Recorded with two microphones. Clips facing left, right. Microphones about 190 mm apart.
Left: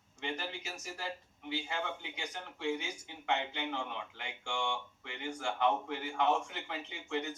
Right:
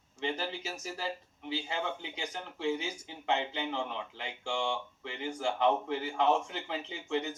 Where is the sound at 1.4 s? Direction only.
20° right (ahead or behind).